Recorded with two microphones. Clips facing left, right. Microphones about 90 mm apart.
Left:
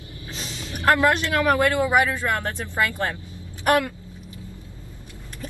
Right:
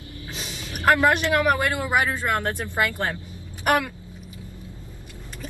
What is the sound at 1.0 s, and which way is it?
Speech, 20° right (ahead or behind).